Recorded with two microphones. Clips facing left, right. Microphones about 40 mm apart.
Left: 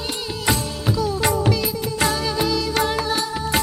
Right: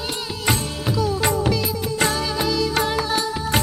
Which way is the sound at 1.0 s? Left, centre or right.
Centre.